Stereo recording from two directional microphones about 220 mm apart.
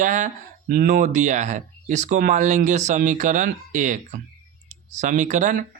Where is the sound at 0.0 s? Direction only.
35° right (ahead or behind).